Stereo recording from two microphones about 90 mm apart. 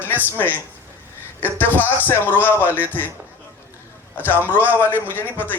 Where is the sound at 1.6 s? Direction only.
20° left (ahead or behind).